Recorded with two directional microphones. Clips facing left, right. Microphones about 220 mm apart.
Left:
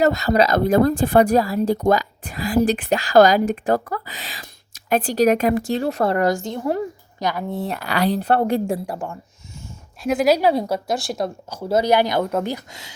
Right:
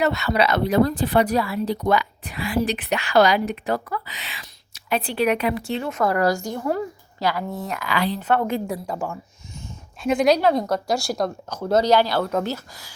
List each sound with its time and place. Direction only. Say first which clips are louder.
0.0 s speech: left 4 dB; 40° left (ahead or behind); by 7.6 s 20° left (ahead or behind)
7.6 s speech: left 4 dB; 35° left (ahead or behind)
10.0 s speech: left 1 dB; 5° left (ahead or behind)